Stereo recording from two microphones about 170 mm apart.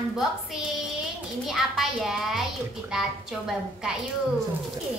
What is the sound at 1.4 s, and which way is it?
A child's voice, centre (ahead or behind).